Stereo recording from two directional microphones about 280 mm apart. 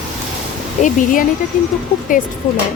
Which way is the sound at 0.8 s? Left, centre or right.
Left.